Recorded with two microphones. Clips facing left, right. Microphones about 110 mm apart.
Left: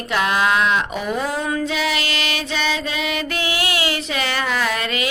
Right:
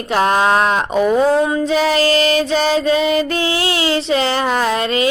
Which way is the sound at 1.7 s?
40° right (ahead or behind).